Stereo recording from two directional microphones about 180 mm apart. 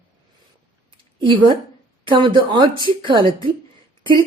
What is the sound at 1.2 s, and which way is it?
Speech, 30° right (ahead or behind).